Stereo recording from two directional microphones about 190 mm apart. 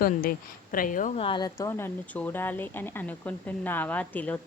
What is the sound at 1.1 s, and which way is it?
Speech, 25° left (ahead or behind).